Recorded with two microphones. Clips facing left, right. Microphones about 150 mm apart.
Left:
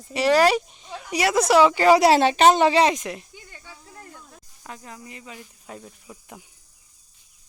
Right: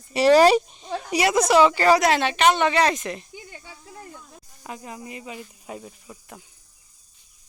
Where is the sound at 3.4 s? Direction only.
25° right (ahead or behind).